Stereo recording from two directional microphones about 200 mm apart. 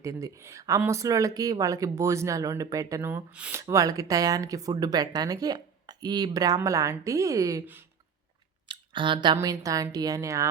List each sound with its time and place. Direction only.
0.0 s speech: 15° right (ahead or behind)